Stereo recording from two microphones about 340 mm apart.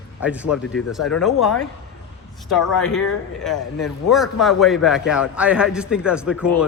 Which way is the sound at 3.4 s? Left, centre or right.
Centre.